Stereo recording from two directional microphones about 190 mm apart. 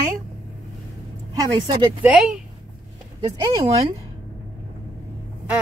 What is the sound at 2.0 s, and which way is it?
Speech, 5° right (ahead or behind).